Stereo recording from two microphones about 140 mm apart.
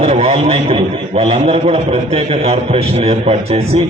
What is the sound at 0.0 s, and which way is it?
A man's voice, 45° right (ahead or behind).